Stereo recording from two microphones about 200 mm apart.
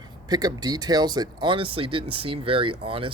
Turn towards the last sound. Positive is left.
turn(degrees=-25)  # may be behind; listen again after turning